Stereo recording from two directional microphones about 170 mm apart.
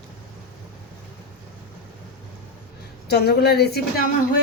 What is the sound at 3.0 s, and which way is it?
A woman's voice, 70° left (ahead or behind).